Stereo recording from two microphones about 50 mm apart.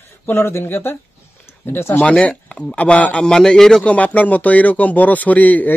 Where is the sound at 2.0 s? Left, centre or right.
Left.